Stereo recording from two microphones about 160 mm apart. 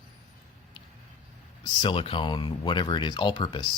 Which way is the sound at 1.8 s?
35° left (ahead or behind).